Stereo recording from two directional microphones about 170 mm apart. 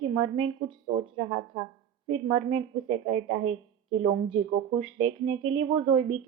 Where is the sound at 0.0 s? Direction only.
30° right (ahead or behind).